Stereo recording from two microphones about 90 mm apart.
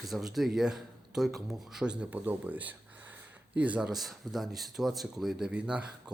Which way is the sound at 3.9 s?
Centre (ahead or behind).